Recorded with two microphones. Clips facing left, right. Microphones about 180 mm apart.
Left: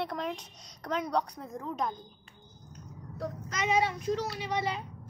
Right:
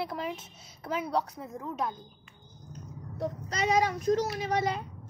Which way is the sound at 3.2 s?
35° right (ahead or behind).